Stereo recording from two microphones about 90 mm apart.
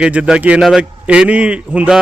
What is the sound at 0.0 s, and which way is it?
Speech, 10° right (ahead or behind).